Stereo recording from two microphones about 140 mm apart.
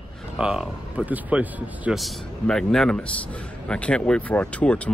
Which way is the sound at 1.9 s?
Centre (ahead or behind).